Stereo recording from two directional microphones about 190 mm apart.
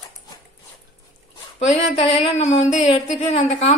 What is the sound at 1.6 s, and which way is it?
A woman's voice, 35° left (ahead or behind).